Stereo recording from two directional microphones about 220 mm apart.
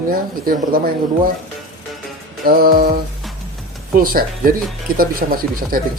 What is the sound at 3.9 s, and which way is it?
Speech, 40° right (ahead or behind).